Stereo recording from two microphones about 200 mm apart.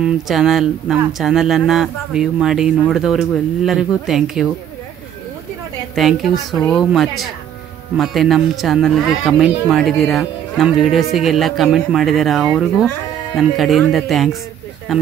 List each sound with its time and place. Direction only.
0.0 s speech: centre (ahead or behind)
5.9 s speech: centre (ahead or behind)